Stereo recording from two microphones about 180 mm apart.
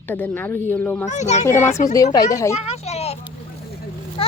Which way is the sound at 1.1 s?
40° left (ahead or behind).